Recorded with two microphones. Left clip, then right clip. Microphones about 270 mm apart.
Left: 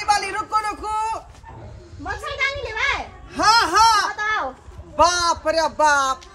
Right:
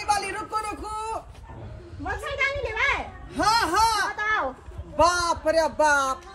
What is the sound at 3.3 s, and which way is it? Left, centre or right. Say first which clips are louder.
Music: left 6 dB; centre.